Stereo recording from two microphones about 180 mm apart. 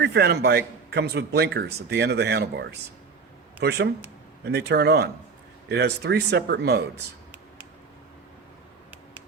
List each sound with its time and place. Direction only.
0.0 s a man's voice: 65° right (ahead or behind)